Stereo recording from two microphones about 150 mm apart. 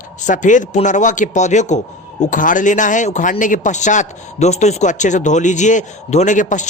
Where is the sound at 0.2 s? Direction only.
55° left (ahead or behind).